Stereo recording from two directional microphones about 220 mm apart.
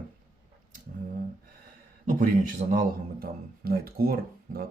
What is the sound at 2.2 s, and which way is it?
A man's voice, 35° right (ahead or behind).